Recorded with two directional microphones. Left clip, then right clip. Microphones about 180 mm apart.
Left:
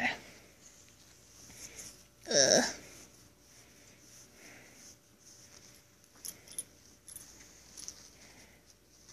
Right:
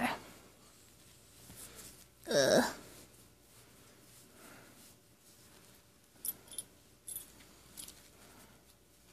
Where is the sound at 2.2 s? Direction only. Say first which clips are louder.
Left 2 dB; 60° right (ahead or behind).